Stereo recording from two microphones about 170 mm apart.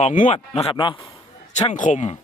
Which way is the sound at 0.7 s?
30° left (ahead or behind).